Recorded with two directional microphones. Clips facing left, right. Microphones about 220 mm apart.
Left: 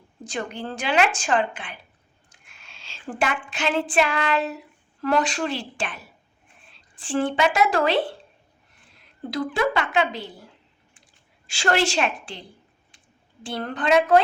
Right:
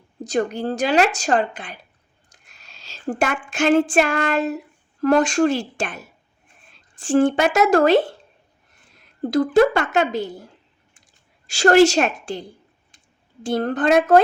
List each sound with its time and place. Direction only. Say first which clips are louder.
0.3 s a woman's voice: right 9 dB; 40° right (ahead or behind)
2.3 s a sound: right 1 dB; 40° right (ahead or behind)
6.7 s speech: right 8 dB; 45° right (ahead or behind)
9.2 s speech: right 9 dB; 45° right (ahead or behind)
10.9 s a sound: left 1 dB; 40° right (ahead or behind)
13.4 s speech: right 7 dB; 45° right (ahead or behind)